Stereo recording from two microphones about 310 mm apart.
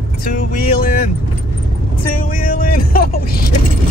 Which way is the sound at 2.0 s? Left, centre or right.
Left.